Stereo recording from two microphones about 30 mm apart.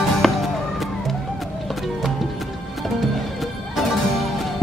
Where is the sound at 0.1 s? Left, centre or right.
Centre.